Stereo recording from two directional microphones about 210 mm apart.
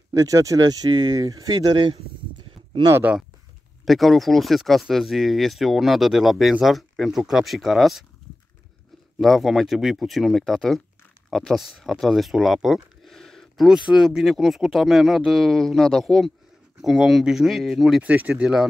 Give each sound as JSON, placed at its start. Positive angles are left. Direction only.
{"t": 0.1, "sound": "speech", "side_deg": -15}
{"t": 3.0, "sound": "speech", "side_deg": -5}
{"t": 9.2, "sound": "speech", "side_deg": 0}